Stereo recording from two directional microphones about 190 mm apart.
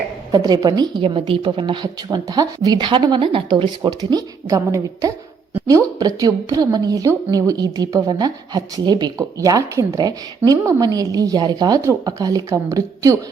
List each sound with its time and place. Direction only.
0.3 s a woman's voice: 20° right (ahead or behind)